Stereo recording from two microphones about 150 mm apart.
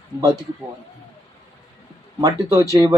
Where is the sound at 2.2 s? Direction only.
20° right (ahead or behind).